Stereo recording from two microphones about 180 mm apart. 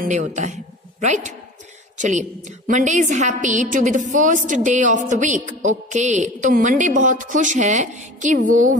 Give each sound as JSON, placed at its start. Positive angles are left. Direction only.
{"t": 0.0, "sound": "a woman's voice", "side_deg": -40}